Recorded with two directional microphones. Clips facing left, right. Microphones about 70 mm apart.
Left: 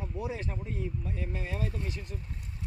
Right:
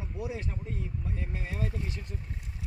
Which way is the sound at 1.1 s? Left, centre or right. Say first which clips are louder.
Left 2 dB; right.